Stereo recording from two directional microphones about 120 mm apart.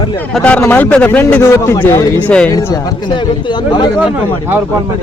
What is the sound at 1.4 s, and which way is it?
Speech, 20° left (ahead or behind).